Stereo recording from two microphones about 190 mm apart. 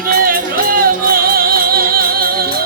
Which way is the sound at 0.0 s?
50° right (ahead or behind).